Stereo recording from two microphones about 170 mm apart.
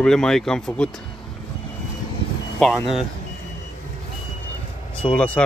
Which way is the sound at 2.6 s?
5° left (ahead or behind).